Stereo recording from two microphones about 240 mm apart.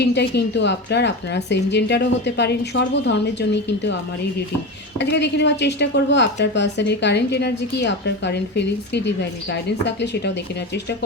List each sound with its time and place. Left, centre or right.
0.0 s a woman's voice: left
4.9 s a woman's voice: left